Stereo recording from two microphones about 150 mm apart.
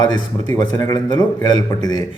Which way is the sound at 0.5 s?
25° left (ahead or behind).